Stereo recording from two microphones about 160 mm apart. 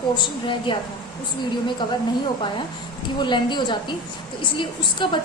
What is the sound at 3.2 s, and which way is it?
A woman's voice, 30° left (ahead or behind).